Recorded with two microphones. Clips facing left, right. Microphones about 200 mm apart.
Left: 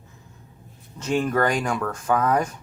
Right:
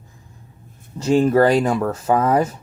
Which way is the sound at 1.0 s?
30° right (ahead or behind).